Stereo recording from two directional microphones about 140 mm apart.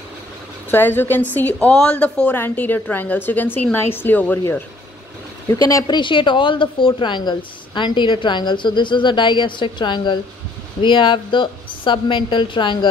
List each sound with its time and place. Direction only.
0.7 s a woman's voice: 15° left (ahead or behind)
5.5 s a woman's voice: 25° left (ahead or behind)